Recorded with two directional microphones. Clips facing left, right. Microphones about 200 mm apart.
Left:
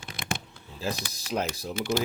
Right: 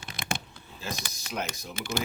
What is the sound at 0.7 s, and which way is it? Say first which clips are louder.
Speech: left 5 dB; 35° left (ahead or behind).